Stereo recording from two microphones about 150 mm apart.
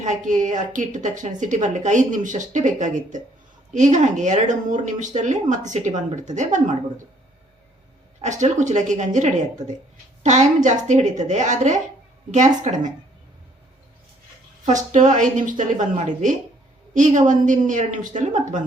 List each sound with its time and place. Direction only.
0.0 s a woman's voice: 55° right (ahead or behind)
8.2 s a woman's voice: 50° right (ahead or behind)
14.6 s a woman's voice: 55° right (ahead or behind)
16.9 s a woman's voice: 55° right (ahead or behind)